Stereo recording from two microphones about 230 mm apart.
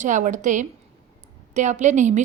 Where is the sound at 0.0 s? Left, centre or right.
Right.